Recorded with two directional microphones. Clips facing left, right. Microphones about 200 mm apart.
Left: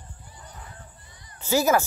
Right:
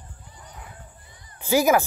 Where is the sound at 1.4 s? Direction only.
10° right (ahead or behind).